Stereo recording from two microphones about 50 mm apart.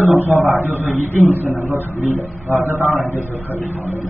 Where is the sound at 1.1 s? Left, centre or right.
Left.